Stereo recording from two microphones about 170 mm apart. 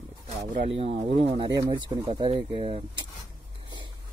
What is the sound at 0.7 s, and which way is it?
Speech, 35° right (ahead or behind).